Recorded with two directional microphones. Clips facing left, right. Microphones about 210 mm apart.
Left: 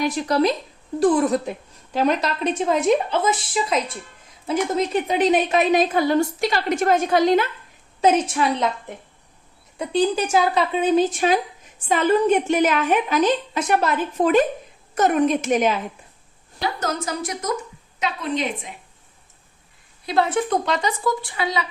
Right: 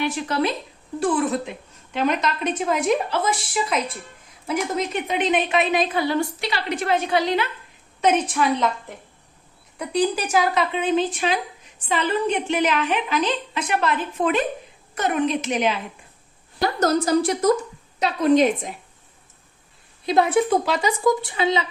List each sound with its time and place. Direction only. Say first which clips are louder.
0.0 s a woman's voice: left 3 dB; 40° left (ahead or behind)
4.4 s speech: left 3 dB; 35° left (ahead or behind)
8.0 s a woman's voice: left 2 dB; 30° left (ahead or behind)
9.7 s speech: left 2 dB; 25° left (ahead or behind); by 15.8 s 45° left (ahead or behind)
16.6 s a woman's voice: right 5 dB; 40° right (ahead or behind)
20.1 s a woman's voice: right 2 dB; 15° right (ahead or behind)
20.5 s speech: right 1 dB; 5° right (ahead or behind); by 21.7 s 25° right (ahead or behind)